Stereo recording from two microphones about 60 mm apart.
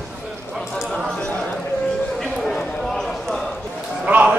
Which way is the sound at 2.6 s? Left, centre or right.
Centre.